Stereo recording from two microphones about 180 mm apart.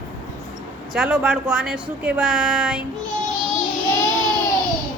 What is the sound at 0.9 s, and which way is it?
Speech, 5° right (ahead or behind).